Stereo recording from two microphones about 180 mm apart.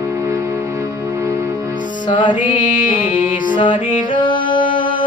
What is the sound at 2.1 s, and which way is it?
Music, 25° left (ahead or behind).